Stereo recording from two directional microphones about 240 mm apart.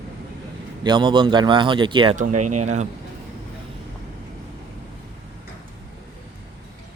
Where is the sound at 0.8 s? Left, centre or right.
Centre.